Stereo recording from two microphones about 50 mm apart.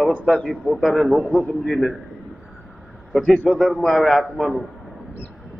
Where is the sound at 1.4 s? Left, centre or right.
Left.